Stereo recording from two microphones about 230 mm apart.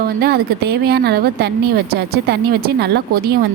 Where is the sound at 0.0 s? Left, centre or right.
Right.